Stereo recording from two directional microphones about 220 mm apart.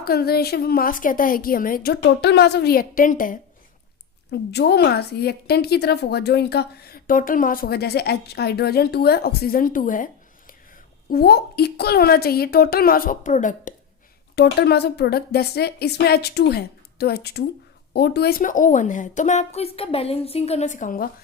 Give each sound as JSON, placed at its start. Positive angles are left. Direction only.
{"t": 0.0, "sound": "a woman's voice", "side_deg": 45}
{"t": 4.3, "sound": "a woman's voice", "side_deg": 50}
{"t": 14.3, "sound": "a woman's voice", "side_deg": 45}